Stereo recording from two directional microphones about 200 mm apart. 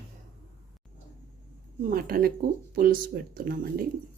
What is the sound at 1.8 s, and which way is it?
Speech, 45° right (ahead or behind).